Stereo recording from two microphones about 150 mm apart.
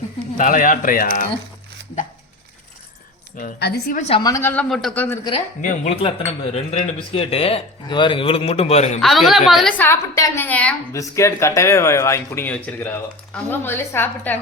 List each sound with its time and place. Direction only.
0.3 s a man's voice: 65° left (ahead or behind)
3.3 s a woman's voice: 75° left (ahead or behind)
3.9 s a woman's voice: 45° left (ahead or behind)
4.2 s speech: 20° left (ahead or behind)
4.7 s a woman's voice: 5° left (ahead or behind)
5.6 s speech: 45° left (ahead or behind)
9.0 s a woman's voice: centre (ahead or behind)
9.7 s a woman's voice: 15° left (ahead or behind)
10.9 s a woman's voice: 20° left (ahead or behind)